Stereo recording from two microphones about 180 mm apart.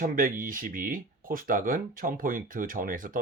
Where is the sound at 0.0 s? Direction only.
50° right (ahead or behind).